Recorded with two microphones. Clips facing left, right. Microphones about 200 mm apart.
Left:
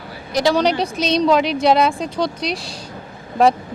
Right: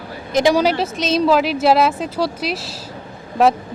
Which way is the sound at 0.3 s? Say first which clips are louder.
Right 2 dB; 15° right (ahead or behind).